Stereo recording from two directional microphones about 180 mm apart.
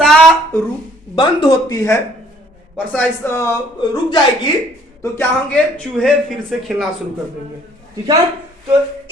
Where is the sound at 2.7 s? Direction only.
10° left (ahead or behind); by 4.2 s 25° left (ahead or behind).